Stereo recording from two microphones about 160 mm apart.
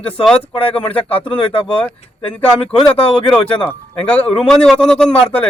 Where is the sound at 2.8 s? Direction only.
35° left (ahead or behind).